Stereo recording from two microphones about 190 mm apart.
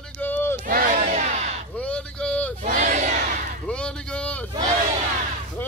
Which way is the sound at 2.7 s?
40° right (ahead or behind).